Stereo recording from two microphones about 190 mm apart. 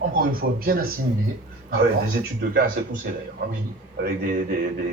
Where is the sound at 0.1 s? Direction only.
50° right (ahead or behind).